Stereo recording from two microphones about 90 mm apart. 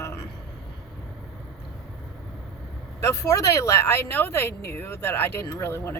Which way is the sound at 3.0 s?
35° left (ahead or behind).